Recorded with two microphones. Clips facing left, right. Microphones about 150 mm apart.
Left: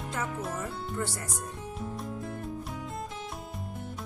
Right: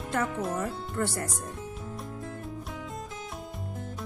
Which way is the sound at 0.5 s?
60° right (ahead or behind).